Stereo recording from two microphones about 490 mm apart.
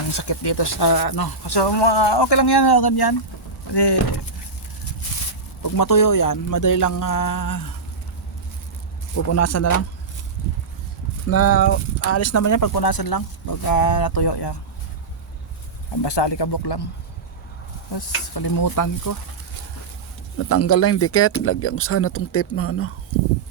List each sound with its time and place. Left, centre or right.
0.1 s speech: left
5.6 s speech: left
9.1 s speech: left
11.3 s speech: left
16.0 s speech: left
17.9 s speech: left
20.4 s speech: left